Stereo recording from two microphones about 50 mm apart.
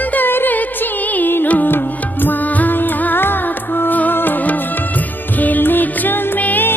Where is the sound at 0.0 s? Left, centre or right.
Left.